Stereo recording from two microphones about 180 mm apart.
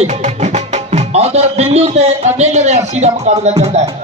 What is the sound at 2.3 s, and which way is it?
Speech, 40° right (ahead or behind).